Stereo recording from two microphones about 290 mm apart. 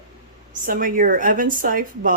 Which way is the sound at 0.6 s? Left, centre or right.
Right.